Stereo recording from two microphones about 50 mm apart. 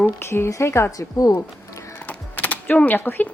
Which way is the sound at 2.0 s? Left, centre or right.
Left.